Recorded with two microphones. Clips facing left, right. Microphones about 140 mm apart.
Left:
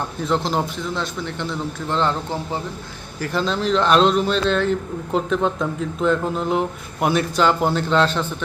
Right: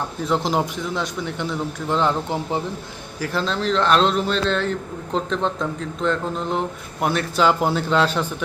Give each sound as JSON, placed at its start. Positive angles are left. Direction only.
{"t": 0.3, "sound": "a man's voice", "side_deg": -10}
{"t": 3.2, "sound": "speech", "side_deg": 0}